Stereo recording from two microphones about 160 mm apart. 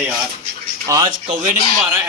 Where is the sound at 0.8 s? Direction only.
25° right (ahead or behind).